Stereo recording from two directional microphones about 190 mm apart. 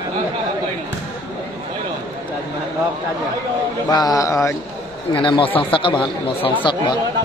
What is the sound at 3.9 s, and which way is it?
Speech, 20° left (ahead or behind).